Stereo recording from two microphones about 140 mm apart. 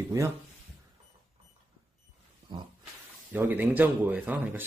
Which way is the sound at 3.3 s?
15° right (ahead or behind).